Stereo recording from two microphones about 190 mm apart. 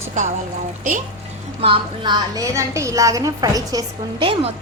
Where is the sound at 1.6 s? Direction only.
25° right (ahead or behind).